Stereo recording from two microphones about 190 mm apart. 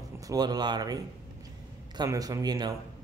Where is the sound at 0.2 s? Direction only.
20° right (ahead or behind).